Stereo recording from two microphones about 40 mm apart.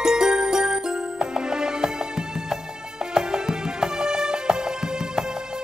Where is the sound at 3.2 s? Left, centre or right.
Centre.